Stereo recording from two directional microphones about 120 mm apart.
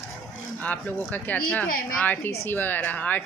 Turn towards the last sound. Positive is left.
turn(degrees=15)  # may be behind; listen again after turning